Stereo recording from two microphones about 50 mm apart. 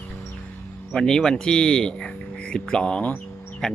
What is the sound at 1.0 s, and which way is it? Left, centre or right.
Speech, centre.